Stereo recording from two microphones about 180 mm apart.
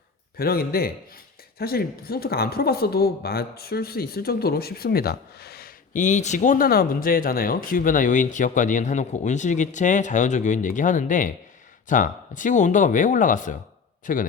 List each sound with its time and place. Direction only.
0.3 s a man's voice: 55° left (ahead or behind)